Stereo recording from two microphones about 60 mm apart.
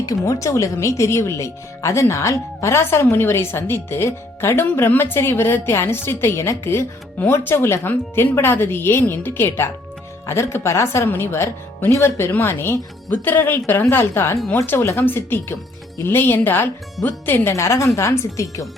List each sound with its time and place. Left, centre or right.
0.0 s speech: left
17.5 s speech: left